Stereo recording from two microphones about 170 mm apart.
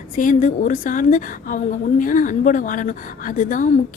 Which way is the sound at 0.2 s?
50° left (ahead or behind).